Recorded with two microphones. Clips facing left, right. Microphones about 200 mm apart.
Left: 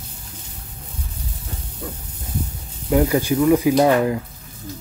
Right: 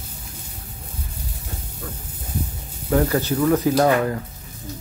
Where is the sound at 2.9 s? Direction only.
10° left (ahead or behind).